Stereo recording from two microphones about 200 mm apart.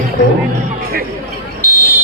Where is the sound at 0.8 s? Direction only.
50° right (ahead or behind).